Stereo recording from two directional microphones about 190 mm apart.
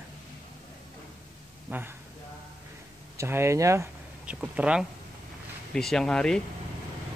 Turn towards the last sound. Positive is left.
turn(degrees=5)  # may be behind; listen again after turning